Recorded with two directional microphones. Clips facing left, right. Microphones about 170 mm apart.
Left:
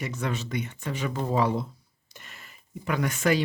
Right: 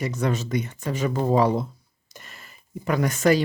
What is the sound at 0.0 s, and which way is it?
Speech, 40° right (ahead or behind).